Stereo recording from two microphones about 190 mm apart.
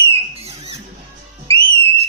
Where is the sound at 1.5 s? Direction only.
35° right (ahead or behind).